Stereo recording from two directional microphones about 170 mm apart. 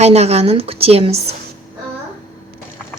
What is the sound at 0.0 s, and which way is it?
Speech, 40° right (ahead or behind).